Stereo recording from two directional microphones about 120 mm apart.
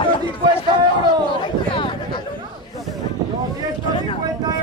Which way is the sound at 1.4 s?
40° left (ahead or behind).